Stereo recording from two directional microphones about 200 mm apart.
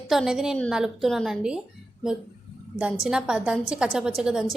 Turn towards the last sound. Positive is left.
turn(degrees=0)  # may be behind; listen again after turning